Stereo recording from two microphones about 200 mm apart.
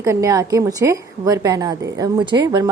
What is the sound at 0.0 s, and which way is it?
Speech, 15° right (ahead or behind).